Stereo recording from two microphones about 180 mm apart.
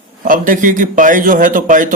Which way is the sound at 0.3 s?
50° right (ahead or behind).